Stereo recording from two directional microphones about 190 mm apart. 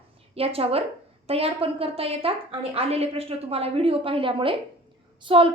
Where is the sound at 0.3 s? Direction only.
30° right (ahead or behind).